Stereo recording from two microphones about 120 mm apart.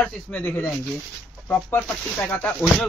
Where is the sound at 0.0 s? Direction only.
10° left (ahead or behind).